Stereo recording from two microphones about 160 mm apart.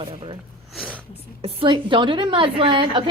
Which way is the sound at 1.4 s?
35° right (ahead or behind).